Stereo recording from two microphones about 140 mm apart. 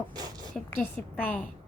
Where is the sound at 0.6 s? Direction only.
10° left (ahead or behind).